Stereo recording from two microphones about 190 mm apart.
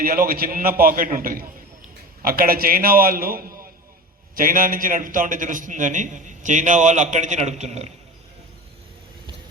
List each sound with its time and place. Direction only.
0.0 s a man's voice: 50° right (ahead or behind)